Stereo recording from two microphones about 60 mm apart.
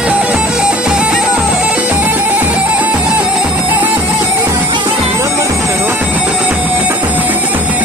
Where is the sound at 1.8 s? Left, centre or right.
Right.